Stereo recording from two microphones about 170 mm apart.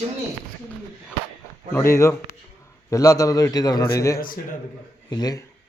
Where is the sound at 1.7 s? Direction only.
15° left (ahead or behind).